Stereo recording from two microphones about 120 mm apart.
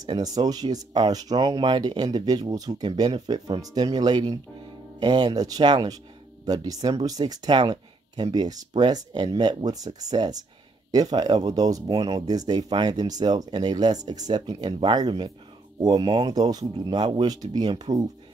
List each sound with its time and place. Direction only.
0.0 s speech: 30° right (ahead or behind)